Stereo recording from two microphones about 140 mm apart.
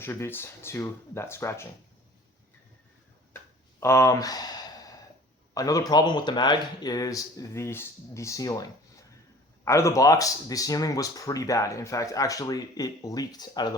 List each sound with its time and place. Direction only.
0.0 s speech: 15° left (ahead or behind)
3.3 s a sound: 20° left (ahead or behind)
5.5 s speech: 25° left (ahead or behind)